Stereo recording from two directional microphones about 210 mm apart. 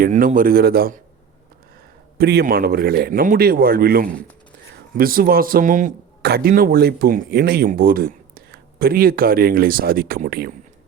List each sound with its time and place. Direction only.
0.0 s speech: 40° right (ahead or behind)
2.1 s speech: 50° right (ahead or behind)